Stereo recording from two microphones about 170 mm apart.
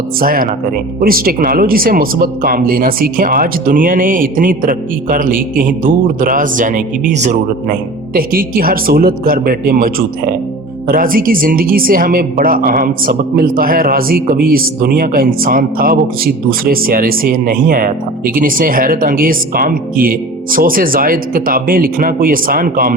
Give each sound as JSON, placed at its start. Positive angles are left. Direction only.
{"t": 0.2, "sound": "speech", "side_deg": -60}